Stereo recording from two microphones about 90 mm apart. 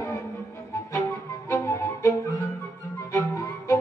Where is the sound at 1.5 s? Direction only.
30° left (ahead or behind).